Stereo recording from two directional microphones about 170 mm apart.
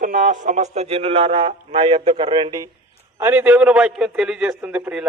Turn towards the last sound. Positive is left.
turn(degrees=-5)  # may be behind; listen again after turning